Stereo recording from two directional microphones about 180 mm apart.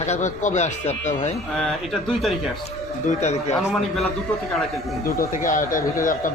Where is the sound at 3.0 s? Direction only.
40° left (ahead or behind).